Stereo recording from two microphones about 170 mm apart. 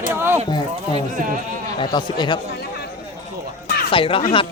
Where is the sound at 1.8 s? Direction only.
25° left (ahead or behind).